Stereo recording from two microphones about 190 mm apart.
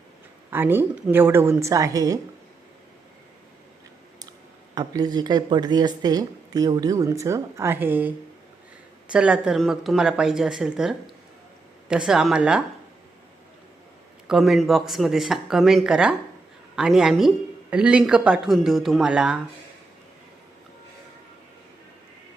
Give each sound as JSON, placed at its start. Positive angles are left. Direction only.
{"t": 0.5, "sound": "a woman's voice", "side_deg": -10}
{"t": 4.7, "sound": "speech", "side_deg": -20}
{"t": 9.1, "sound": "a woman's voice", "side_deg": -5}
{"t": 14.3, "sound": "a woman's voice", "side_deg": 0}